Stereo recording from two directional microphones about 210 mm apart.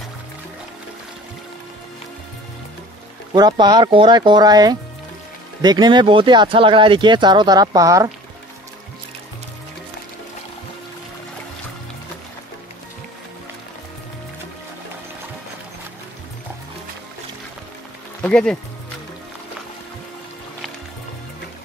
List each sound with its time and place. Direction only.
3.3 s speech: 20° right (ahead or behind)
18.2 s speech: 5° left (ahead or behind)